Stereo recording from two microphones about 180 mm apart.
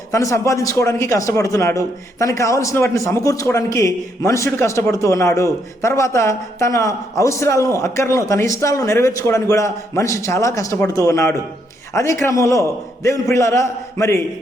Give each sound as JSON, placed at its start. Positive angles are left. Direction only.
{"t": 0.1, "sound": "a man's voice", "side_deg": 15}